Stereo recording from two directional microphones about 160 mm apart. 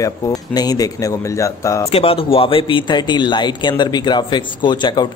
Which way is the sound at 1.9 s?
35° left (ahead or behind).